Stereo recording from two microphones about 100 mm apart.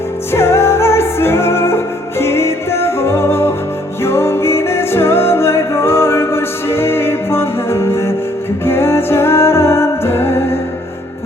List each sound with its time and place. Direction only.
0.3 s music: 25° left (ahead or behind)